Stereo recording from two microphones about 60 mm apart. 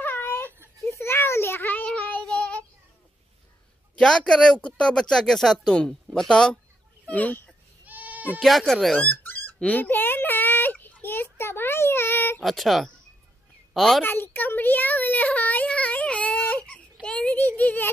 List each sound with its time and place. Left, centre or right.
0.0 s a sound: left
1.9 s child singing: left
4.0 s speech: centre
7.1 s speech: left
7.8 s bleat: right
8.4 s speech: centre
9.1 s dog: left
9.6 s a sound: left
12.4 s speech: centre
14.0 s a sound: left
17.5 s speech: left